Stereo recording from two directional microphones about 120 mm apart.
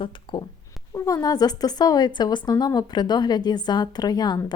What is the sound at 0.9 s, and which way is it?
A woman's voice, 30° left (ahead or behind).